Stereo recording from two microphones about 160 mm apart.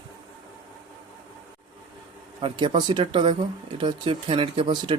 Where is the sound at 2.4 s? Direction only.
30° right (ahead or behind).